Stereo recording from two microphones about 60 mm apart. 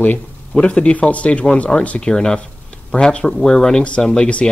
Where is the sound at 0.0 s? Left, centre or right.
Left.